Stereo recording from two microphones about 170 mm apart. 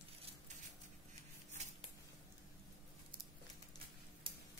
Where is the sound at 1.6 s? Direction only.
40° right (ahead or behind).